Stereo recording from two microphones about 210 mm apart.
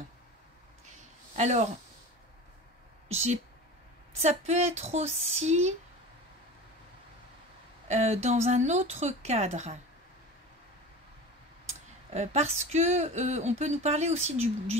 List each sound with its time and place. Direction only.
1.3 s speech: 30° right (ahead or behind)
3.1 s speech: 30° right (ahead or behind)
7.9 s speech: 30° right (ahead or behind)
12.1 s speech: 30° right (ahead or behind)